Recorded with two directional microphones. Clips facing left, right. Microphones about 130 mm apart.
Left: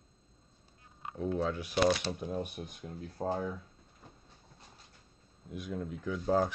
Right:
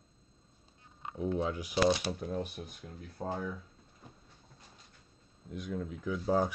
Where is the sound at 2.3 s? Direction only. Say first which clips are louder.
Even; 20° left (ahead or behind).